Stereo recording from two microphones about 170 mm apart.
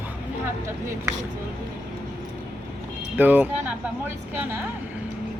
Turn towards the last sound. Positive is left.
turn(degrees=-15)  # may be behind; listen again after turning